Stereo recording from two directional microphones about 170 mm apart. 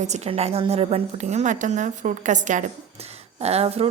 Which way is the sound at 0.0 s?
40° right (ahead or behind).